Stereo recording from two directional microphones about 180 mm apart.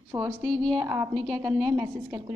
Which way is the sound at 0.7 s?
20° right (ahead or behind).